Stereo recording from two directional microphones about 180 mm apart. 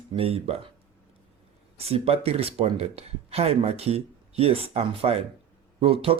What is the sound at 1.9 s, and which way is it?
Speech, 35° right (ahead or behind).